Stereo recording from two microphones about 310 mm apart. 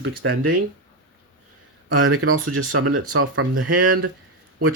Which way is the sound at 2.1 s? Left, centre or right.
Right.